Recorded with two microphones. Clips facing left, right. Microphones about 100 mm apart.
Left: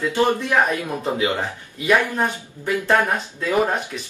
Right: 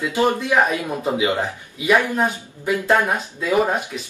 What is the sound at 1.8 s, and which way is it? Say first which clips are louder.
Speech: right 1 dB; 10° right (ahead or behind).